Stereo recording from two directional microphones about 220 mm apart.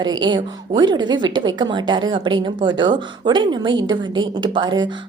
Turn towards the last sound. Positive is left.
turn(degrees=-20)  # may be behind; listen again after turning